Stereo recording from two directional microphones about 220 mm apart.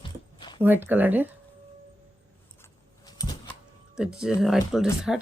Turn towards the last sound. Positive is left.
turn(degrees=0)  # may be behind; listen again after turning